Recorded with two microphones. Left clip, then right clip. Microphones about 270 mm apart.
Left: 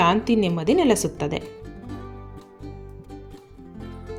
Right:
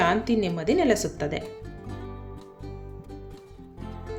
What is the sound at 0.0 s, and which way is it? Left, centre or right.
Speech, centre.